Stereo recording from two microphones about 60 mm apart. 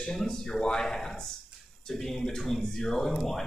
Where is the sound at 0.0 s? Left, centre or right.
Centre.